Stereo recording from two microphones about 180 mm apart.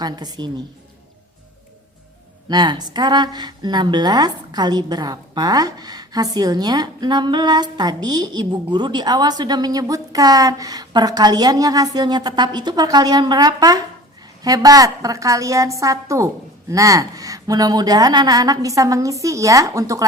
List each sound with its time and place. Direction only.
0.0 s a woman's voice: 25° right (ahead or behind)
2.5 s a woman's voice: 25° right (ahead or behind)